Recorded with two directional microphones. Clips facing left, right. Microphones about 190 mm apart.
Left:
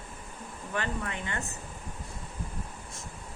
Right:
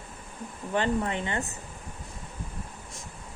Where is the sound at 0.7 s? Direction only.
25° right (ahead or behind).